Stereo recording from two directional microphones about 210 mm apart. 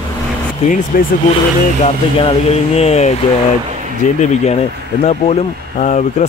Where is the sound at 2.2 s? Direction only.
30° left (ahead or behind).